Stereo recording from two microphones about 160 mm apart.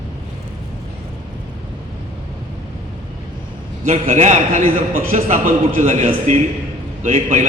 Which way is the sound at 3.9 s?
50° right (ahead or behind).